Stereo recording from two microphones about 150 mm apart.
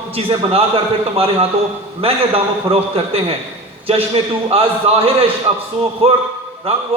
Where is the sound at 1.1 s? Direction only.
40° right (ahead or behind).